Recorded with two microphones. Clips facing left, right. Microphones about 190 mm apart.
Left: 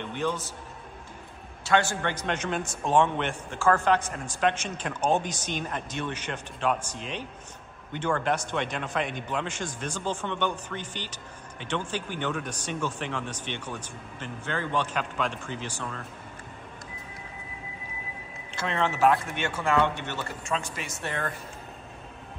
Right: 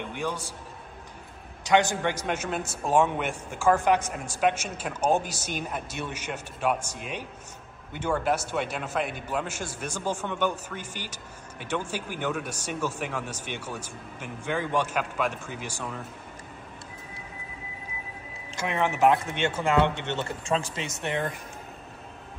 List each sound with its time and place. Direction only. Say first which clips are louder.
0.0 s a man's voice: left 2 dB; 10° right (ahead or behind)
1.6 s a man's voice: right 2 dB; 15° right (ahead or behind)
18.6 s speech: right 1 dB; 15° right (ahead or behind)